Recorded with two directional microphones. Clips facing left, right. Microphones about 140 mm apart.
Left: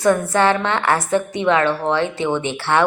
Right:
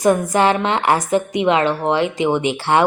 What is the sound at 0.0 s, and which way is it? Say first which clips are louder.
A woman's voice: right 1 dB; 15° right (ahead or behind).